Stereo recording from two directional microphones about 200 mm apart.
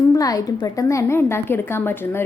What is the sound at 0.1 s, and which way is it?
A woman's voice, 15° left (ahead or behind).